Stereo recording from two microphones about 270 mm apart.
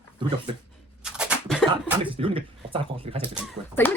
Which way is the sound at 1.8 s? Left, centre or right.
Centre.